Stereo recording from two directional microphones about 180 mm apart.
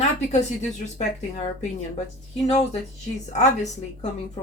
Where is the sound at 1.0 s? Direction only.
40° left (ahead or behind).